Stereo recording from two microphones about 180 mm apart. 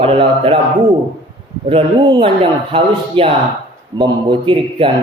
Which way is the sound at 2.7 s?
30° right (ahead or behind).